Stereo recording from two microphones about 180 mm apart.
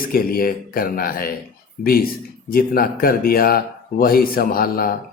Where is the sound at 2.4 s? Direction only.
55° left (ahead or behind).